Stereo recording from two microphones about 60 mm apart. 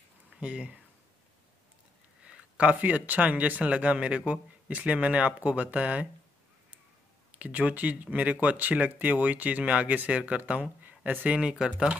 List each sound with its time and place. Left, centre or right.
0.4 s speech: centre
2.2 s speech: centre
7.3 s speech: right
11.5 s speech: centre